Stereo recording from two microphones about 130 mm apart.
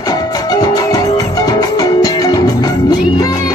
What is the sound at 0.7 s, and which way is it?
Music, 25° left (ahead or behind).